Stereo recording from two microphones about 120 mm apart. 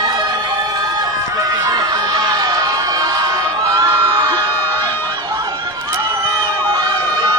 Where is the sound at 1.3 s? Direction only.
30° right (ahead or behind).